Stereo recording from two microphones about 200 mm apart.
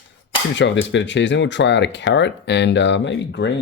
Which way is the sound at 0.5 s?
65° left (ahead or behind).